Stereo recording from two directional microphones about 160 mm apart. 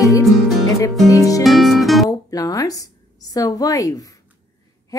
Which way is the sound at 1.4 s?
Centre (ahead or behind).